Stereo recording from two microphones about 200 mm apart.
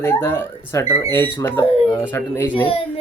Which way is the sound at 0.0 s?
10° left (ahead or behind).